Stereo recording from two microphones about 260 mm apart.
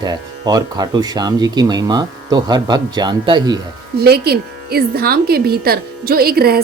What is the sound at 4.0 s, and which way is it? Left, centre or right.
A woman's voice, right.